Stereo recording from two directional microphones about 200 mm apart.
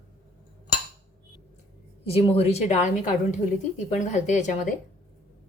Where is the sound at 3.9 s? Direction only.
35° left (ahead or behind).